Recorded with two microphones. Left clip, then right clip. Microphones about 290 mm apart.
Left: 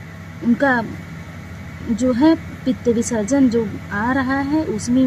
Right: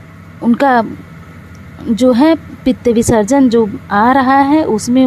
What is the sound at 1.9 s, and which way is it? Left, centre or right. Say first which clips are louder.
Speech: right 6 dB; right.